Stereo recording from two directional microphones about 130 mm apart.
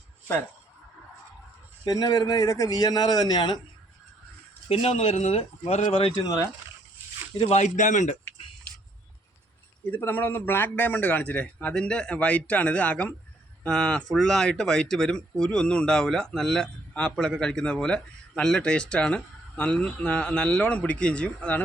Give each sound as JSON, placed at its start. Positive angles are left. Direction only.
{"t": 1.8, "sound": "a man's voice", "side_deg": 30}
{"t": 4.7, "sound": "speech", "side_deg": 50}
{"t": 6.1, "sound": "a man's voice", "side_deg": 25}
{"t": 7.3, "sound": "a man's voice", "side_deg": 55}
{"t": 9.9, "sound": "speech", "side_deg": 15}